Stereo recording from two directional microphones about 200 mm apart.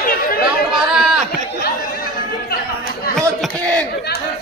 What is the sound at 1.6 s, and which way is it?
Chatter, 50° left (ahead or behind).